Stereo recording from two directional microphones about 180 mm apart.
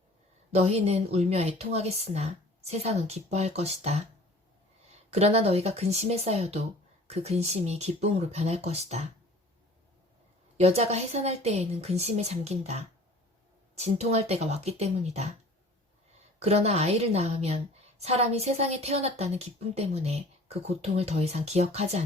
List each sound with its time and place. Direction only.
0.5 s a woman's voice: 35° right (ahead or behind)
5.1 s a woman's voice: 35° right (ahead or behind)
10.6 s a woman's voice: 35° right (ahead or behind)
16.4 s a woman's voice: 35° right (ahead or behind)